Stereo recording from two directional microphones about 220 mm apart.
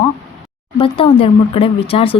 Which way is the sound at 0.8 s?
25° left (ahead or behind).